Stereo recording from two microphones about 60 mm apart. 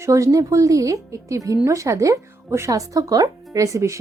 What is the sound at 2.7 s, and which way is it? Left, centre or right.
Speech, right.